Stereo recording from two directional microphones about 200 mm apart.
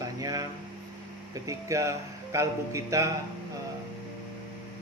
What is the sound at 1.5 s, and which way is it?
A man's voice, 15° right (ahead or behind).